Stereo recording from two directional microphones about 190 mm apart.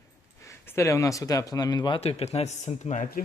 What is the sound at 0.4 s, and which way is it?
Speech, 10° left (ahead or behind).